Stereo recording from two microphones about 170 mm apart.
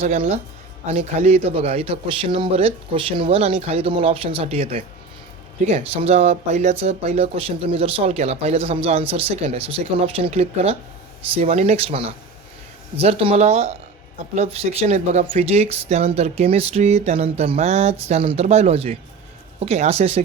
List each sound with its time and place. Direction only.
0.0 s a man's voice: 40° right (ahead or behind)